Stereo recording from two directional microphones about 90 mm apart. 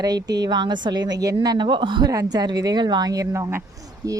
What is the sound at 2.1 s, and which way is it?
A woman's voice, 45° right (ahead or behind).